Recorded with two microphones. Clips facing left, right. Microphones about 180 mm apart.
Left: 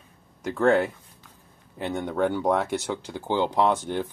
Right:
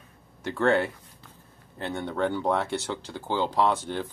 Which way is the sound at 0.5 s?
5° left (ahead or behind).